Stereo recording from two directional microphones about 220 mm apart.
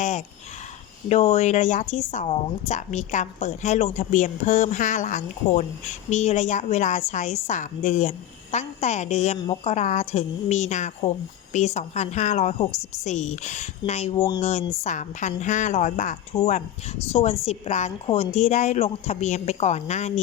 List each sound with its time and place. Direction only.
1.0 s a woman's voice: 30° left (ahead or behind)